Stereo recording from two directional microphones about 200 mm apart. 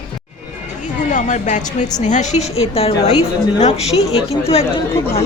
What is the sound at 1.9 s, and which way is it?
A woman's voice, 35° left (ahead or behind).